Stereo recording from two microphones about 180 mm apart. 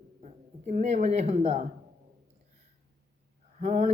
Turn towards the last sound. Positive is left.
turn(degrees=-45)  # may be behind; listen again after turning